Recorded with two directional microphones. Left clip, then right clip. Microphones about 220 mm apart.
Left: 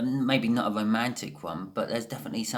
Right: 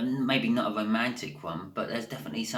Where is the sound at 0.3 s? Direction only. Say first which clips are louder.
Left 1 dB; 50° left (ahead or behind).